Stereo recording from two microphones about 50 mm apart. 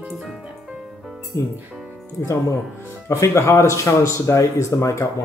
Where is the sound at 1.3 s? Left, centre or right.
Left.